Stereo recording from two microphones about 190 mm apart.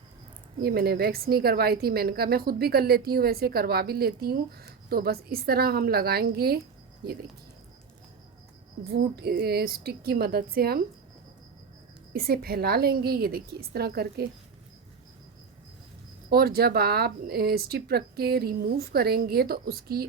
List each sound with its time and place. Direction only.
0.6 s a woman's voice: 55° right (ahead or behind)
8.8 s a woman's voice: 55° right (ahead or behind)
12.1 s a woman's voice: 50° right (ahead or behind)
16.3 s speech: 55° right (ahead or behind)